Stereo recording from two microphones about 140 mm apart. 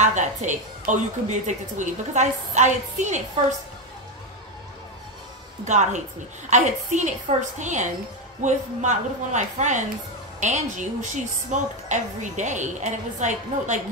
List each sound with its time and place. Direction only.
0.0 s a woman's voice: 60° right (ahead or behind)
5.7 s a woman's voice: 60° right (ahead or behind)